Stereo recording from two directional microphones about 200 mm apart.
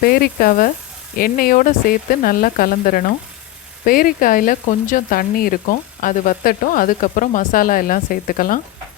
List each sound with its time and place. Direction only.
0.0 s speech: 50° left (ahead or behind)